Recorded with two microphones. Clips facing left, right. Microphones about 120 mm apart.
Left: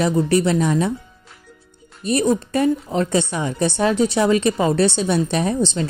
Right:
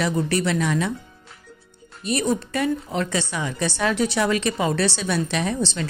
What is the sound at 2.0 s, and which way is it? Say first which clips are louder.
Speech: left 5 dB; 35° left (ahead or behind).